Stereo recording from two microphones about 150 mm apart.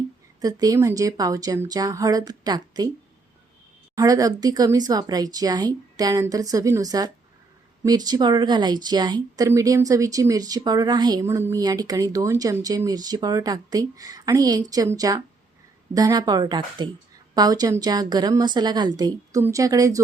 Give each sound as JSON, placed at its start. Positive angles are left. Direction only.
{"t": 0.4, "sound": "speech", "side_deg": -25}
{"t": 3.9, "sound": "speech", "side_deg": -25}